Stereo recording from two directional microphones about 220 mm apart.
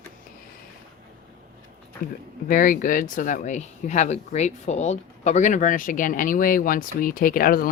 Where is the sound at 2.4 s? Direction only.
40° left (ahead or behind).